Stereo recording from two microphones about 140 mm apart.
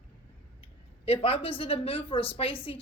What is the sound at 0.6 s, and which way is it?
Speech, 45° left (ahead or behind).